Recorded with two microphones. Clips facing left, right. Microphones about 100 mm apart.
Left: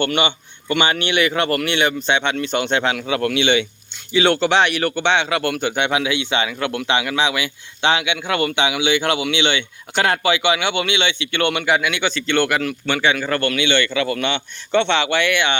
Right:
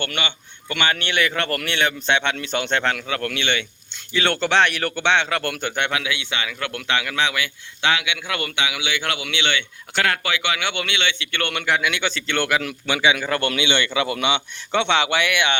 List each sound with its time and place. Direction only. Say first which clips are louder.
0.0 s speech: left 8 dB; 20° left (ahead or behind)
6.0 s speech: left 6 dB; 25° left (ahead or behind); by 13.5 s 10° right (ahead or behind)
13.5 s a man's voice: left 3 dB; 20° right (ahead or behind)